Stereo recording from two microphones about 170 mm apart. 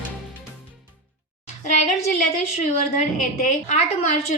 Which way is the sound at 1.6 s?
45° left (ahead or behind).